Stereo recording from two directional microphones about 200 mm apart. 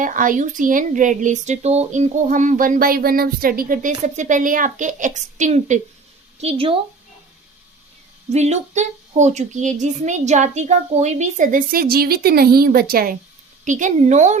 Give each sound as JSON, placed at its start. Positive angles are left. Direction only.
{"t": 0.0, "sound": "speech", "side_deg": -40}
{"t": 8.3, "sound": "speech", "side_deg": -35}